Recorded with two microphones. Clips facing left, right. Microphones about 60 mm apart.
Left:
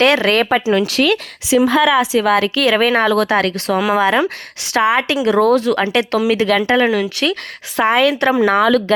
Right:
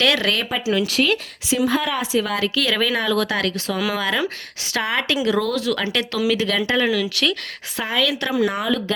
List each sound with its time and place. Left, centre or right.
0.0 s speech: left
0.3 s a woman's voice: left
4.8 s speech: left
5.2 s a woman's voice: left
6.5 s a woman's voice: left
8.3 s speech: left